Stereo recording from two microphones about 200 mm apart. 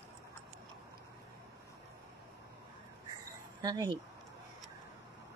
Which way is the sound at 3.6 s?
20° right (ahead or behind).